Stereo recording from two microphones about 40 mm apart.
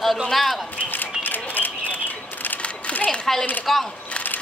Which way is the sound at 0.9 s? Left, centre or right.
Left.